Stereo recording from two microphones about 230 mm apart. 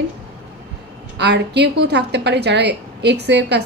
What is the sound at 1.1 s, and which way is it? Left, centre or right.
A woman's voice, right.